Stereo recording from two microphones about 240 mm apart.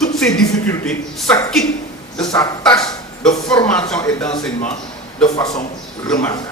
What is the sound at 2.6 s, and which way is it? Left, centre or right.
A man's voice, centre.